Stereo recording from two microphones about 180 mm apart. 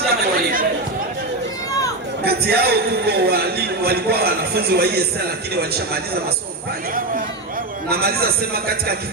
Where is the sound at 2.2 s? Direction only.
65° right (ahead or behind).